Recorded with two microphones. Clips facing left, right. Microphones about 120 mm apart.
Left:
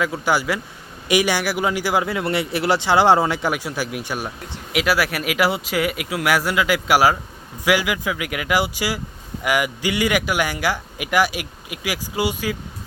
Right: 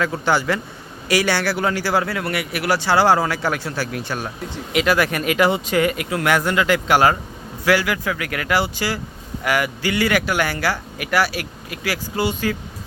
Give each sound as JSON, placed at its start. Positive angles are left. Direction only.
{"t": 0.0, "sound": "speech", "side_deg": 10}